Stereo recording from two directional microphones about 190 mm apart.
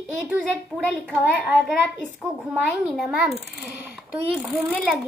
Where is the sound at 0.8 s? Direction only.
5° left (ahead or behind).